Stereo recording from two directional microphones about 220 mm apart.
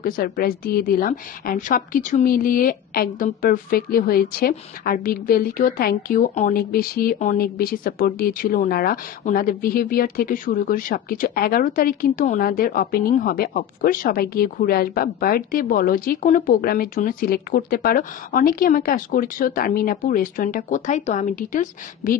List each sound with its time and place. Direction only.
0.0 s a woman's voice: 40° left (ahead or behind)